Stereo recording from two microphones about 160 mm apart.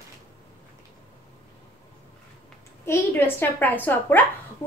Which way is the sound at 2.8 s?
15° left (ahead or behind).